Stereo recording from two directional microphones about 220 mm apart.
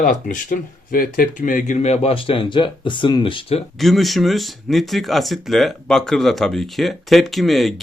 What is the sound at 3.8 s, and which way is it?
Speech, centre (ahead or behind).